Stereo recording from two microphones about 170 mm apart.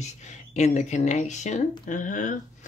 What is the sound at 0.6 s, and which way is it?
Speech, 45° left (ahead or behind).